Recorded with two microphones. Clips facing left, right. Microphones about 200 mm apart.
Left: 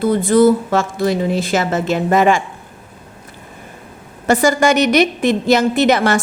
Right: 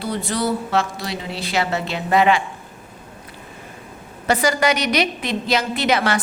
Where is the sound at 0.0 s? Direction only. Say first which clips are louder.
Left 12 dB; 50° left (ahead or behind).